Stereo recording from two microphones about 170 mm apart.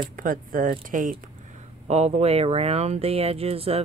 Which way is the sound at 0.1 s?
55° right (ahead or behind).